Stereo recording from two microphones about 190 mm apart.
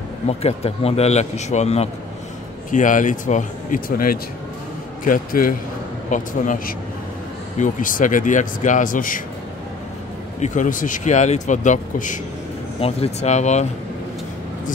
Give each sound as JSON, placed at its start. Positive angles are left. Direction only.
{"t": 0.3, "sound": "speech", "side_deg": 35}
{"t": 10.4, "sound": "speech", "side_deg": 40}